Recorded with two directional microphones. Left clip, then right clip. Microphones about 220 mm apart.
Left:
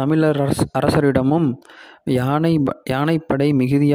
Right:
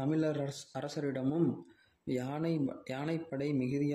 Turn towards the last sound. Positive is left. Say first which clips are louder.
# left 17 dB
turn(degrees=50)  # may be behind; listen again after turning